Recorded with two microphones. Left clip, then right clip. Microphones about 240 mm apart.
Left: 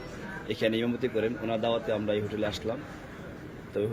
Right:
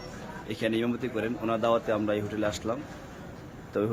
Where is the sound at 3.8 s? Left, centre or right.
Right.